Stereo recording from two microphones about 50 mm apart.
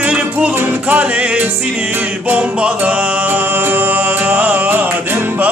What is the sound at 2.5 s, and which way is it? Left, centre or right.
Music, right.